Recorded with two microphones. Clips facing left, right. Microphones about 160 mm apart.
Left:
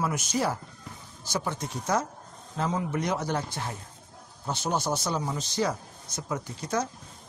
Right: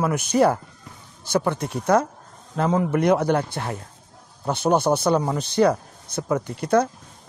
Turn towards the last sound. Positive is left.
turn(degrees=-60)  # may be behind; listen again after turning